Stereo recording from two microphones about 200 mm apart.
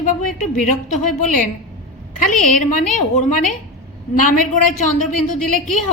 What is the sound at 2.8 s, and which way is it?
A woman's voice, 40° left (ahead or behind).